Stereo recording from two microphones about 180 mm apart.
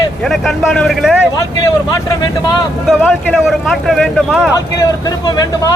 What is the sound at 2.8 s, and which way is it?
Speech, centre (ahead or behind).